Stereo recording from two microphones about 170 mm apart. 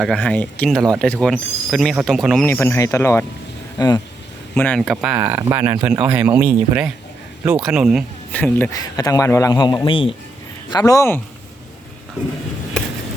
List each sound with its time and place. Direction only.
0.0 s speech: 5° left (ahead or behind)
2.5 s a man's voice: 15° left (ahead or behind)
4.5 s speech: 10° left (ahead or behind)
4.9 s speech: 10° right (ahead or behind)
8.3 s speech: 10° left (ahead or behind)
8.7 s a man's voice: 20° left (ahead or behind)